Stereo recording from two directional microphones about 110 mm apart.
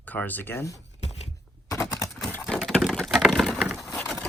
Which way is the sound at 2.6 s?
Centre (ahead or behind).